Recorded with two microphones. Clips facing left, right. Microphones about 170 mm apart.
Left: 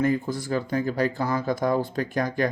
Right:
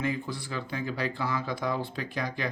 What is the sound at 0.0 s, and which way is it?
Speech, 45° left (ahead or behind).